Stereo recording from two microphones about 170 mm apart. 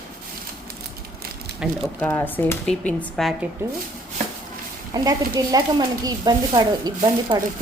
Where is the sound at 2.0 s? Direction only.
15° left (ahead or behind).